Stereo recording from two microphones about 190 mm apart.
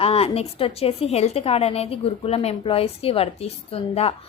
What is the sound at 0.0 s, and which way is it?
A woman's voice, 30° left (ahead or behind).